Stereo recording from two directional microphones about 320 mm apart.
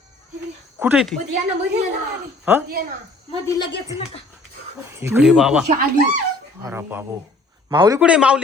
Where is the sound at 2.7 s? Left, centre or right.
Right.